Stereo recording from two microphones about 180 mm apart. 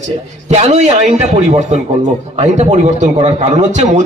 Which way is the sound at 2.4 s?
40° right (ahead or behind).